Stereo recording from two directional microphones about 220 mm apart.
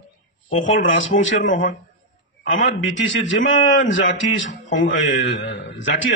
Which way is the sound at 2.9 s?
55° left (ahead or behind).